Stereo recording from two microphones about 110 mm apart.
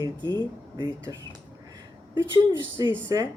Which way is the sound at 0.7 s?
40° right (ahead or behind).